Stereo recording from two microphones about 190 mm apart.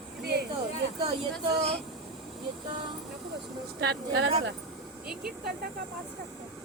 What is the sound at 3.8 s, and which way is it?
Speech, 60° right (ahead or behind).